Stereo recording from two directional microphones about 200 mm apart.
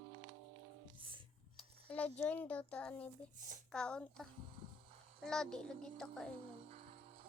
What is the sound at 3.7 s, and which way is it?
Child singing, 5° left (ahead or behind).